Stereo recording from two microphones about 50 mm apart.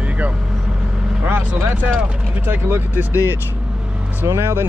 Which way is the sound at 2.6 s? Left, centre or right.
Right.